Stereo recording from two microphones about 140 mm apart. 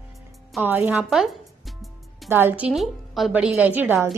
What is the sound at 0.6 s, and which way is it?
Speech, 15° right (ahead or behind).